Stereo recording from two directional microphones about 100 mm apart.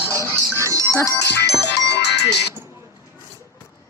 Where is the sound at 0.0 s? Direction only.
25° left (ahead or behind).